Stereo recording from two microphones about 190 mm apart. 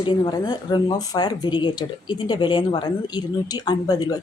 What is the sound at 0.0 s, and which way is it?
Speech, 20° left (ahead or behind).